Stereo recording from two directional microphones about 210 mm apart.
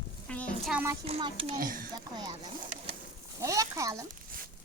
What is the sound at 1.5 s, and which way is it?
Speech, 40° right (ahead or behind).